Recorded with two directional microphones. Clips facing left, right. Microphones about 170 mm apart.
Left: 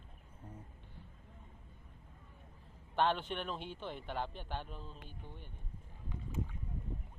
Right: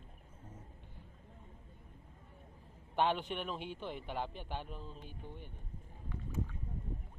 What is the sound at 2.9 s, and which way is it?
A man's voice, 10° right (ahead or behind).